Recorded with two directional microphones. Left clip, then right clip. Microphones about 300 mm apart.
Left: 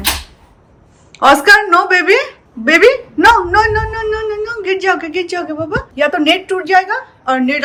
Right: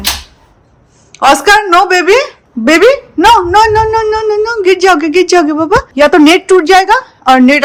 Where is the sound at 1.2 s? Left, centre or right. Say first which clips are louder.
Right 2 dB; centre.